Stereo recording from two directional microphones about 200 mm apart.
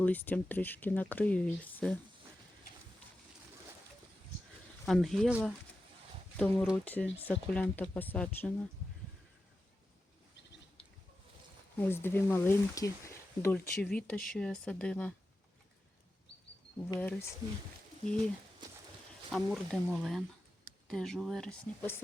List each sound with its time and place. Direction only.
0.0 s speech: 10° left (ahead or behind)
4.9 s speech: centre (ahead or behind)
11.8 s speech: 10° left (ahead or behind)
17.0 s speech: 10° left (ahead or behind)
19.3 s speech: centre (ahead or behind)